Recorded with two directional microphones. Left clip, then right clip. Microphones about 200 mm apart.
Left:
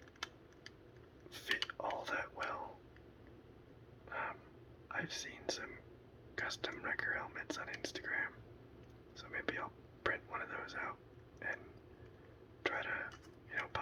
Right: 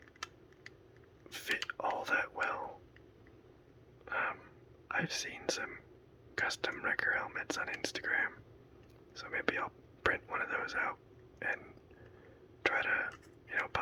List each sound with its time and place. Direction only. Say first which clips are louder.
1.3 s whispering: right 2 dB; 30° right (ahead or behind)
4.1 s a sound: right 7 dB; 30° right (ahead or behind)
4.9 s whispering: right 6 dB; 30° right (ahead or behind)
6.3 s speech: right 6 dB; 30° right (ahead or behind)
12.6 s speech: right 7 dB; 30° right (ahead or behind)
13.1 s whispering: right 6 dB; 30° right (ahead or behind)